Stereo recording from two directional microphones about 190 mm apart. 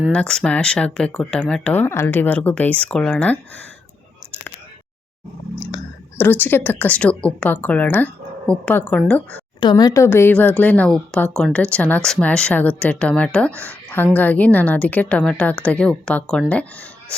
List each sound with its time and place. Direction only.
0.1 s speech: 5° left (ahead or behind)
5.5 s speech: 15° left (ahead or behind)
9.6 s speech: 20° left (ahead or behind); by 16.6 s 5° left (ahead or behind)